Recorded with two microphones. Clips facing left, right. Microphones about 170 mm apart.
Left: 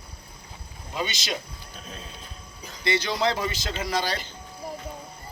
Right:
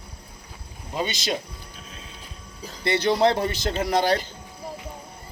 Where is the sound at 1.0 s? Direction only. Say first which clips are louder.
Right 4 dB; 50° right (ahead or behind).